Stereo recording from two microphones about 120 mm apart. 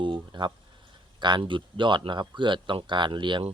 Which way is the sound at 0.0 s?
40° right (ahead or behind).